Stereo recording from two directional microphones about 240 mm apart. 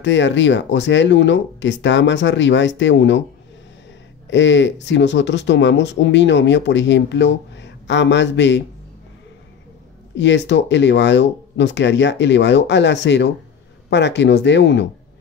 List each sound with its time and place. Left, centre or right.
0.0 s speech: left
4.3 s speech: left
10.1 s speech: left